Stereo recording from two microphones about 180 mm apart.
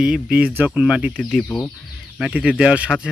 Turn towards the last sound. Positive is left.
turn(degrees=-5)  # may be behind; listen again after turning